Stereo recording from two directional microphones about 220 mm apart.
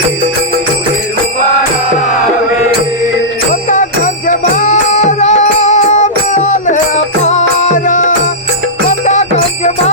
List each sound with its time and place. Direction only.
3.5 s music: 35° left (ahead or behind)